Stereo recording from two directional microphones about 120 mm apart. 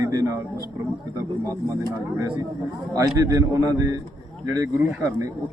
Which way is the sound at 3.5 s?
30° right (ahead or behind).